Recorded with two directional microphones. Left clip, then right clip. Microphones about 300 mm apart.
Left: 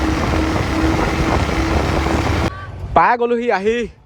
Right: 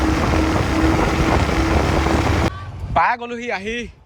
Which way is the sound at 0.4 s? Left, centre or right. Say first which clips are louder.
Even; centre.